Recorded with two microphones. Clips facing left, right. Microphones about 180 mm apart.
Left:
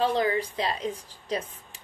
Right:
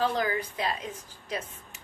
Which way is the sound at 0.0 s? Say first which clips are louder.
Left 3 dB; 30° left (ahead or behind).